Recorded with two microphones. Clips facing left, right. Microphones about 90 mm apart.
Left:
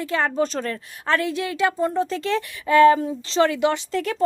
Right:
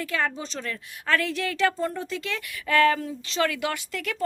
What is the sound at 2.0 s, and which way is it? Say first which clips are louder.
Speech: left 9 dB; 35° left (ahead or behind).